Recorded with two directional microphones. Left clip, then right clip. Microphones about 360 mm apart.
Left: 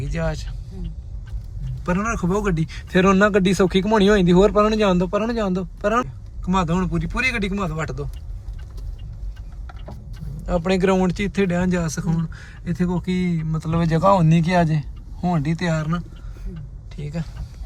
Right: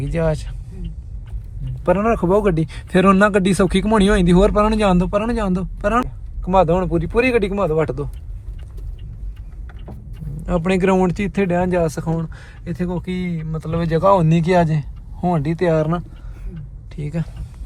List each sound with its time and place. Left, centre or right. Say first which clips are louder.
0.0 s speech: right 6 dB; centre
1.8 s a man's voice: right 7 dB; centre
10.4 s a man's voice: right 2 dB; centre
16.9 s speech: right 4 dB; centre